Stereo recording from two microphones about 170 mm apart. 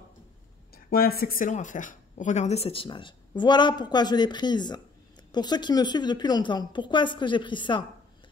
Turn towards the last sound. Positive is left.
turn(degrees=30)  # may be behind; listen again after turning